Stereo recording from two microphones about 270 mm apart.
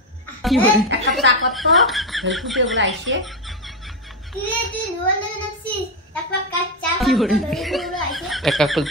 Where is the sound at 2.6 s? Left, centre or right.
Right.